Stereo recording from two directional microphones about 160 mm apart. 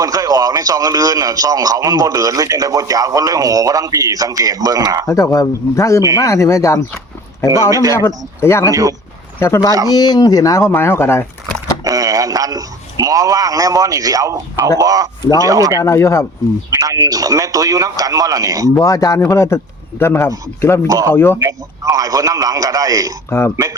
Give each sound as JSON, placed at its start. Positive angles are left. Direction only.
{"t": 0.0, "sound": "speech", "side_deg": -25}
{"t": 5.0, "sound": "speech", "side_deg": 20}
{"t": 7.7, "sound": "speech", "side_deg": -20}
{"t": 7.9, "sound": "speech", "side_deg": 15}
{"t": 8.7, "sound": "speech", "side_deg": -20}
{"t": 9.4, "sound": "speech", "side_deg": 20}
{"t": 11.9, "sound": "a man's voice", "side_deg": -20}
{"t": 15.8, "sound": "speech", "side_deg": 20}
{"t": 16.6, "sound": "speech", "side_deg": -20}
{"t": 18.7, "sound": "speech", "side_deg": 20}
{"t": 20.8, "sound": "speech", "side_deg": -20}
{"t": 21.1, "sound": "speech", "side_deg": 15}
{"t": 21.3, "sound": "speech", "side_deg": -20}